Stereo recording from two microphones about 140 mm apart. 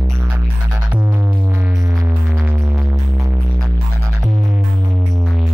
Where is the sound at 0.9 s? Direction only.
15° right (ahead or behind).